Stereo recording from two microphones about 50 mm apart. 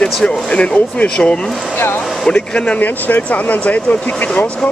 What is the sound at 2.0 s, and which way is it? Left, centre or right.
Speech, centre.